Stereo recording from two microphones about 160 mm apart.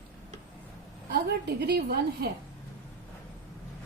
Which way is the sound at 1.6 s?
90° right.